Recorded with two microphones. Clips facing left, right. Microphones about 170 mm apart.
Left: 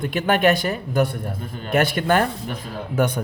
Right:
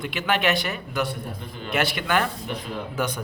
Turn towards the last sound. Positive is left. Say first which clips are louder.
# left 6 dB
turn(degrees=55)  # may be behind; listen again after turning